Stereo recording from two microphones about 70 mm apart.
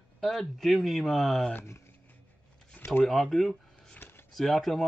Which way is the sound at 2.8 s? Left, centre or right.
Left.